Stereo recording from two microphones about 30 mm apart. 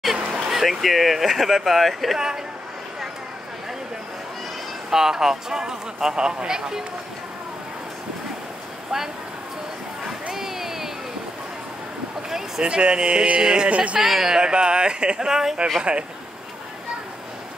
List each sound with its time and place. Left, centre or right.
0.0 s a sound: centre
0.7 s speech: centre
4.9 s speech: centre
10.3 s a sound: centre
12.3 s speech: centre
12.6 s speech: right
13.4 s a sound: right
13.7 s speech: right
14.0 s speech: centre
14.3 s speech: right
15.8 s speech: right